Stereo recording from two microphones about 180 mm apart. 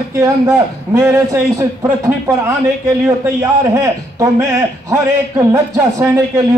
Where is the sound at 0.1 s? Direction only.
15° right (ahead or behind).